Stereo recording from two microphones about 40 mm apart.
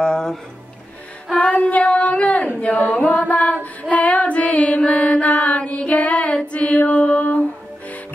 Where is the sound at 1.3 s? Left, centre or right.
Left.